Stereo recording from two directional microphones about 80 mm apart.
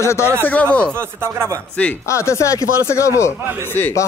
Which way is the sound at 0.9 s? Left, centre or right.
Right.